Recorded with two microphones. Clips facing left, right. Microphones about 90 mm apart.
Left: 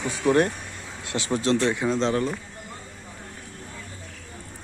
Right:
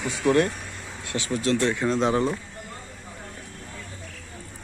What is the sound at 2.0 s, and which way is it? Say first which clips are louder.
Speech: right 3 dB; 20° right (ahead or behind).